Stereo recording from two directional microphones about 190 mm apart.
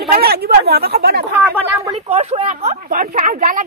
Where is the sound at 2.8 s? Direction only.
45° right (ahead or behind).